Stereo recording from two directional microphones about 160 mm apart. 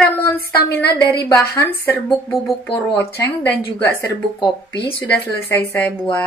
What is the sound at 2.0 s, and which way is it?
Speech, centre (ahead or behind).